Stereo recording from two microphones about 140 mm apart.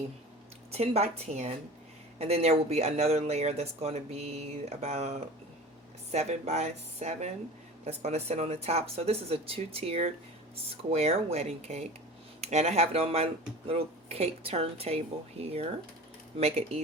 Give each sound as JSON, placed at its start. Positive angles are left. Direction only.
{"t": 0.7, "sound": "speech", "side_deg": -45}